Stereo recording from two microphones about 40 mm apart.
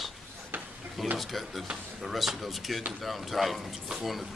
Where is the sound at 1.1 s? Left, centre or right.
Centre.